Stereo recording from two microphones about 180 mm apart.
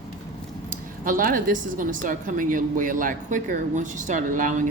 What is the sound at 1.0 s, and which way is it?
Speech, 50° right (ahead or behind).